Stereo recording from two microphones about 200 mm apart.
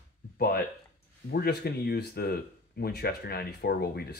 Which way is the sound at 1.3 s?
55° left (ahead or behind).